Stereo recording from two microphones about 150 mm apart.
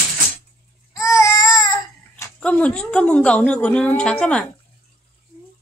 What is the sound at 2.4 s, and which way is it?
A woman's voice, 5° left (ahead or behind).